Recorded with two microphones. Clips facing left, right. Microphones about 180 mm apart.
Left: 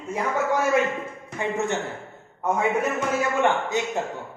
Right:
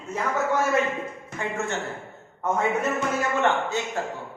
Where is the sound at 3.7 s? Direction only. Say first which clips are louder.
Left 3 dB; 15° left (ahead or behind).